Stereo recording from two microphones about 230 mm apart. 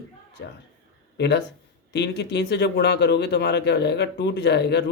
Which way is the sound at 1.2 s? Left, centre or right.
Left.